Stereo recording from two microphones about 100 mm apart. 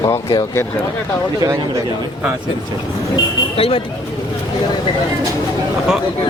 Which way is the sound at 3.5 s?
70° left (ahead or behind).